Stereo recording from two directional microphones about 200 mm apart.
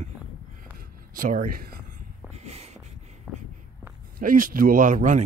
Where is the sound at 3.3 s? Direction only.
5° right (ahead or behind).